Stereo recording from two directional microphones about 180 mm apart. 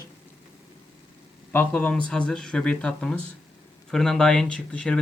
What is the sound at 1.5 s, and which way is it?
Speech, 10° left (ahead or behind).